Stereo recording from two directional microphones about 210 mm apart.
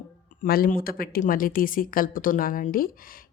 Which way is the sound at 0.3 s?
40° left (ahead or behind).